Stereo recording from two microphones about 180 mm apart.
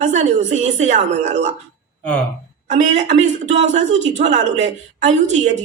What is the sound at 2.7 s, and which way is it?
Speech, 40° right (ahead or behind).